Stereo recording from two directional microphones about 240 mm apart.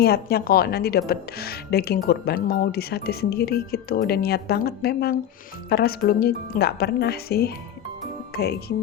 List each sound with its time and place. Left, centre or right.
0.0 s a woman's voice: left